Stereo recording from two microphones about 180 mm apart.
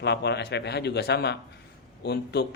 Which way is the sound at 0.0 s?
70° left (ahead or behind).